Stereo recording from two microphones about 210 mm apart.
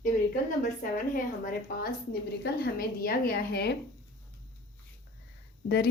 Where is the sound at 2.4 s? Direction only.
50° left (ahead or behind).